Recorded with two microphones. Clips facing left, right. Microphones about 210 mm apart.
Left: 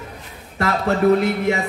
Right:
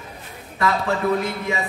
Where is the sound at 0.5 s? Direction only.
45° left (ahead or behind).